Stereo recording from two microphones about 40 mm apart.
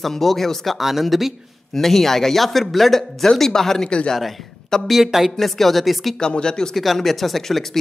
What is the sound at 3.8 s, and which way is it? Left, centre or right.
Speech, left.